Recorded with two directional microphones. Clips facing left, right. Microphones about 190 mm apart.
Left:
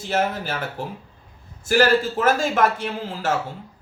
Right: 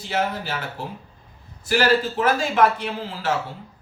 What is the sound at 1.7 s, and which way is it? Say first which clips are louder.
Speech: left 2 dB; 45° left (ahead or behind).